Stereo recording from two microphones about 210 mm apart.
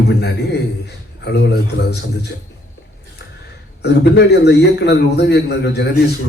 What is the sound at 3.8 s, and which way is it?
A man's voice, 50° left (ahead or behind).